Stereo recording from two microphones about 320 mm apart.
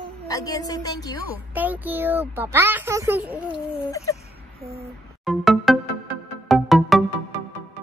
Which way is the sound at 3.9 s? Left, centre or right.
Centre.